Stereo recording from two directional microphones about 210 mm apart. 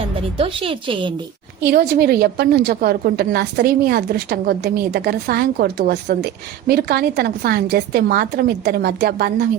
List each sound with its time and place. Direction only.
0.3 s a woman's voice: 25° right (ahead or behind)
1.6 s a woman's voice: 50° right (ahead or behind)